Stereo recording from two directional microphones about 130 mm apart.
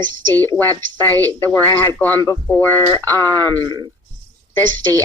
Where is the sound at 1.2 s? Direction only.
25° right (ahead or behind).